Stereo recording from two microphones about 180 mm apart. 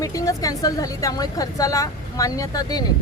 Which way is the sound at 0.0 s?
20° left (ahead or behind).